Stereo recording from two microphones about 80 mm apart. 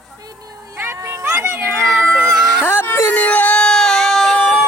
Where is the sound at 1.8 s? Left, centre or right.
Centre.